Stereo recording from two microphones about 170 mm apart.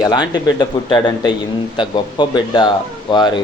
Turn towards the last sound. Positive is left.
turn(degrees=25)  # may be behind; listen again after turning